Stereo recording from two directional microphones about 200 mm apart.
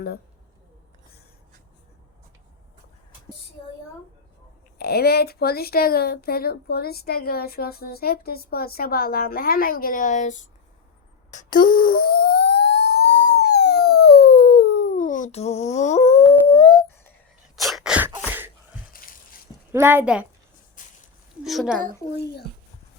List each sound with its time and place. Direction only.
4.8 s speech: 50° left (ahead or behind)
11.3 s a sound: 40° left (ahead or behind); by 13.4 s 55° left (ahead or behind)
13.5 s dog: 55° left (ahead or behind); by 16.8 s 25° left (ahead or behind)
17.6 s sneeze: centre (ahead or behind)
19.7 s a woman's voice: 10° right (ahead or behind)
20.8 s a sound: 40° left (ahead or behind)
21.4 s a woman's voice: centre (ahead or behind)
22.2 s speech: 55° left (ahead or behind)